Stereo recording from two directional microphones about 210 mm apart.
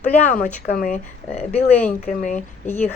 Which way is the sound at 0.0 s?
35° left (ahead or behind).